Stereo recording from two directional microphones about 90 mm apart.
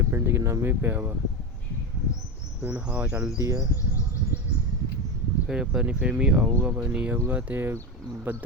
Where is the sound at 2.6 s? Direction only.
15° right (ahead or behind).